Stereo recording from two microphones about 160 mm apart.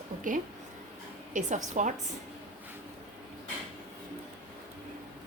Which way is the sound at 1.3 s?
50° right (ahead or behind).